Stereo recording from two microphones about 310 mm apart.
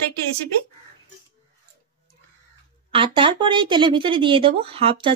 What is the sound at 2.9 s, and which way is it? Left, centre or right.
Speech, centre.